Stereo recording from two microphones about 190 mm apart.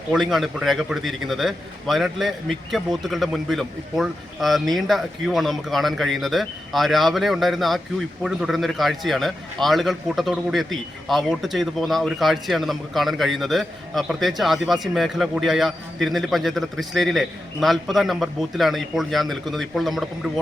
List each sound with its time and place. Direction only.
0.1 s a man's voice: centre (ahead or behind)